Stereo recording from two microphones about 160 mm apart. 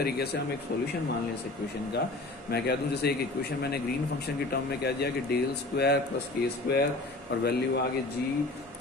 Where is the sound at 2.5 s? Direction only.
90° left.